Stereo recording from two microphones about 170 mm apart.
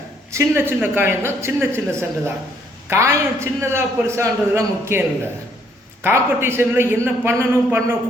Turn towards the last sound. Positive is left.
turn(degrees=-15)  # may be behind; listen again after turning